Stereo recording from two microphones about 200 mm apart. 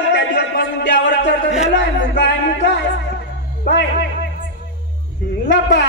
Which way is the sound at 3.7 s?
60° left (ahead or behind).